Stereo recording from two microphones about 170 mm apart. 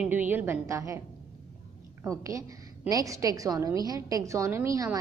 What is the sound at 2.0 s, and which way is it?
A woman's voice, 20° right (ahead or behind).